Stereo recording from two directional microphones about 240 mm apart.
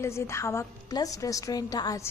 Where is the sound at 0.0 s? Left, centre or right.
Centre.